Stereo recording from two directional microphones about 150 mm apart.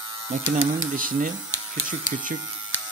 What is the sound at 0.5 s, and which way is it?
Speech, 60° right (ahead or behind).